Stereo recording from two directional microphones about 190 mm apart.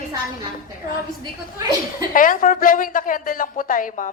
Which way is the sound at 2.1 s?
45° left (ahead or behind).